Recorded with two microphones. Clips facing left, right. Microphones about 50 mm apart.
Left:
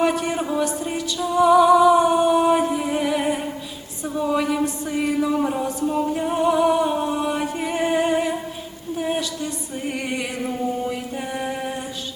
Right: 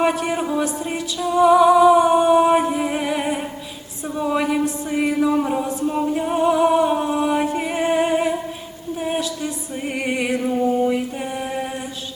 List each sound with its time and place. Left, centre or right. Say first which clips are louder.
0.0 s music: right 1 dB; centre
4.0 s a sound: right 1 dB; centre
4.8 s music: right 2 dB; centre
10.7 s mantra: right 6 dB; centre